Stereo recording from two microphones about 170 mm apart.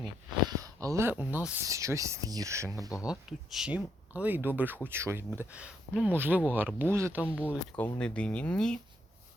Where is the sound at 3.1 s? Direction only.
5° right (ahead or behind).